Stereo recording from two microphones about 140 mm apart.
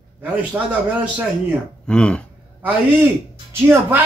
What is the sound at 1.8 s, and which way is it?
Speech, 5° left (ahead or behind).